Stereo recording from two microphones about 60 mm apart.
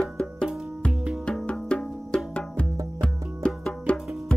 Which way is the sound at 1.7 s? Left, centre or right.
Centre.